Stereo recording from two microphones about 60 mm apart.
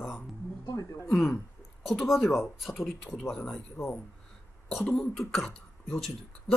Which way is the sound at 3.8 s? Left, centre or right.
Left.